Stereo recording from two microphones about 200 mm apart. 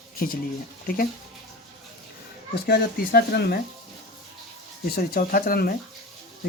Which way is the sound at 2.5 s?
55° left (ahead or behind).